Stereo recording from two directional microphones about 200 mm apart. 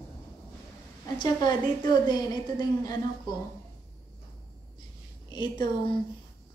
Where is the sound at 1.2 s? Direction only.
20° left (ahead or behind).